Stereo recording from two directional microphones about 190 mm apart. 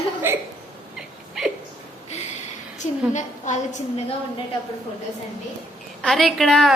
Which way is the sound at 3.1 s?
40° left (ahead or behind).